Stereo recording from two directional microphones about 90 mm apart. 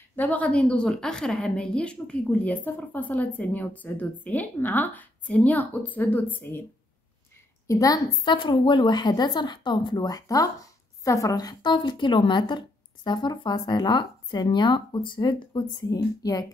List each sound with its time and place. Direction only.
0.1 s a woman's voice: 15° left (ahead or behind)
7.6 s a woman's voice: 40° left (ahead or behind)
8.3 s a woman's voice: 60° left (ahead or behind); by 16.4 s 45° left (ahead or behind)